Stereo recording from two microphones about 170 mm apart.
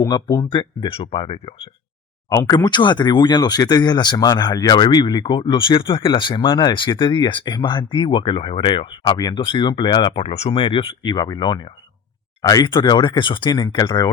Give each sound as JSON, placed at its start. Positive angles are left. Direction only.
{"t": 0.0, "sound": "speech", "side_deg": 20}
{"t": 2.3, "sound": "speech", "side_deg": 20}